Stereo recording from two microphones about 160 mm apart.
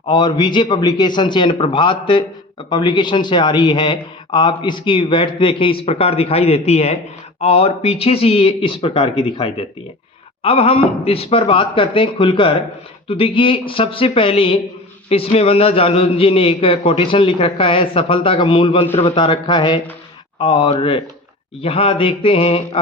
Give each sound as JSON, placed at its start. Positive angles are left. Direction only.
{"t": 0.1, "sound": "a man's voice", "side_deg": 30}